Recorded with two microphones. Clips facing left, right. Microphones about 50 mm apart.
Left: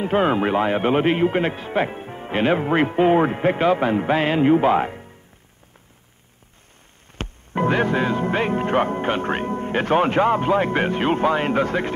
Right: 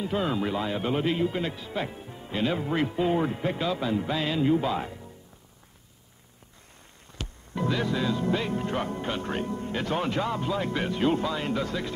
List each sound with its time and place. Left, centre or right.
0.0 s a man's voice: left
7.2 s speech: left